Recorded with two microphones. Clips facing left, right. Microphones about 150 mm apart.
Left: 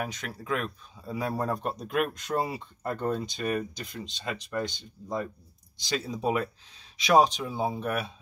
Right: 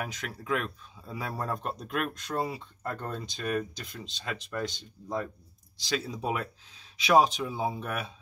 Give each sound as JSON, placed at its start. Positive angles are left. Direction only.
{"t": 0.1, "sound": "speech", "side_deg": 0}